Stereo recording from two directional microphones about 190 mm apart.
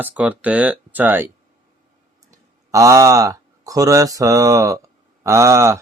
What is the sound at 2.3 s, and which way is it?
Speech, 15° right (ahead or behind).